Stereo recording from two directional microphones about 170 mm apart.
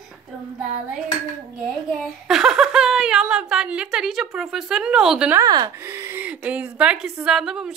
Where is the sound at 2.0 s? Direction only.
Centre (ahead or behind).